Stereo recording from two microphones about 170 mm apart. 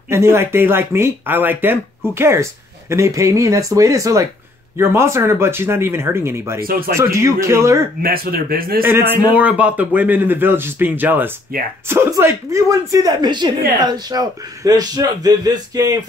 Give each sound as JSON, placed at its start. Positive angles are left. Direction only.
{"t": 0.1, "sound": "speech", "side_deg": -15}
{"t": 8.0, "sound": "speech", "side_deg": -60}
{"t": 8.8, "sound": "speech", "side_deg": -10}